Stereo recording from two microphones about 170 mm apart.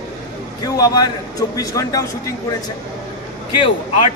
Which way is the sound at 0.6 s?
20° left (ahead or behind).